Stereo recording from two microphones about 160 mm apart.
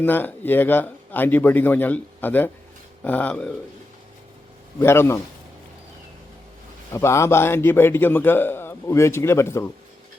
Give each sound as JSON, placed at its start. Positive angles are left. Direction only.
{"t": 0.0, "sound": "a man's voice", "side_deg": 10}
{"t": 4.8, "sound": "a man's voice", "side_deg": 15}
{"t": 6.9, "sound": "a man's voice", "side_deg": 15}